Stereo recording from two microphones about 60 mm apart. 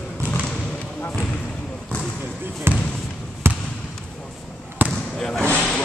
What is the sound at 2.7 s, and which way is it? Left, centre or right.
Speech, right.